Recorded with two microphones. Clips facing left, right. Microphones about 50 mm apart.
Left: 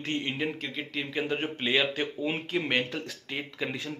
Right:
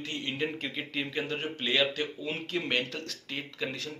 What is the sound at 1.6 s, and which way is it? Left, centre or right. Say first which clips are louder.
Speech: even; centre.